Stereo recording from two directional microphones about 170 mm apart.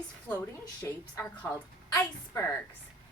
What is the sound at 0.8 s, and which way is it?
A woman's voice, 10° left (ahead or behind).